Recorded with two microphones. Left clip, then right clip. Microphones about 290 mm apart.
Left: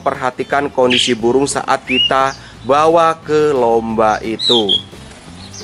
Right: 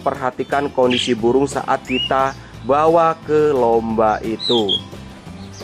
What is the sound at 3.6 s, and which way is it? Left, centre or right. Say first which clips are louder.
Speech: left 2 dB; right.